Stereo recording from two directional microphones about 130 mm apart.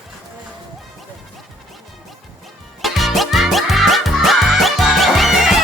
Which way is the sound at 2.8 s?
Centre (ahead or behind).